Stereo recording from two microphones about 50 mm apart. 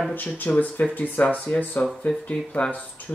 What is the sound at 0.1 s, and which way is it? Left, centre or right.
Speech, left.